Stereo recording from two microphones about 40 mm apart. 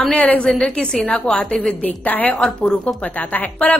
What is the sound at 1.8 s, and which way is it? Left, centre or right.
Speech, left.